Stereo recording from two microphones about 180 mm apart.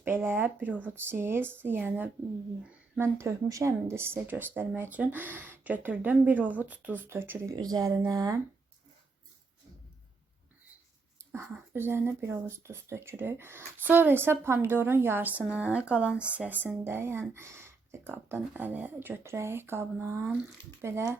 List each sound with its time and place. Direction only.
0.0 s speech: 10° right (ahead or behind)
11.2 s a sound: 15° right (ahead or behind)
11.5 s speech: 10° right (ahead or behind)